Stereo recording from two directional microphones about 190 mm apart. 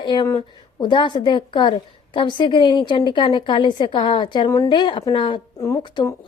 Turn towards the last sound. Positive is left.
turn(degrees=25)  # may be behind; listen again after turning